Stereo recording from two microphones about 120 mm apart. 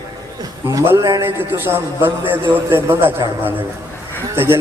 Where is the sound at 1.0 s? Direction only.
30° right (ahead or behind).